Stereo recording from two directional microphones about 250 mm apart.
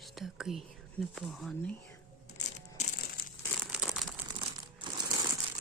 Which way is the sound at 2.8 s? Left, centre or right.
Left.